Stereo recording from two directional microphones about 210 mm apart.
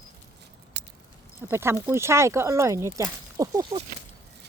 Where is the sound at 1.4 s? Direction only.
10° right (ahead or behind).